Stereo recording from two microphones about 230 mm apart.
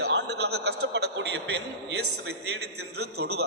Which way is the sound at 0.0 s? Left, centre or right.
Right.